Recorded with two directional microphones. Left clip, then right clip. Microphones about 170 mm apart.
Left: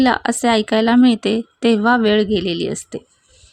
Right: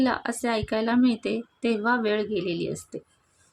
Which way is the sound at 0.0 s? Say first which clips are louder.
Left 10 dB; 50° left (ahead or behind).